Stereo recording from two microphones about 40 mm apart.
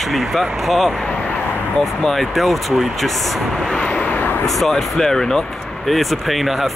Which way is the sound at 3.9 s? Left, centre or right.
Left.